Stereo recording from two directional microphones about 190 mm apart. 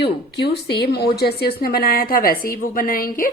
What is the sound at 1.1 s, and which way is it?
A woman's voice, 55° left (ahead or behind).